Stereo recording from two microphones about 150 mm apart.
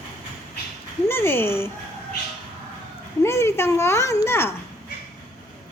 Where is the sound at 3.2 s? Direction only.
20° left (ahead or behind).